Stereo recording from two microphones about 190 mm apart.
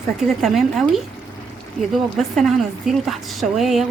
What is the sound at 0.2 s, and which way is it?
A woman's voice, centre (ahead or behind).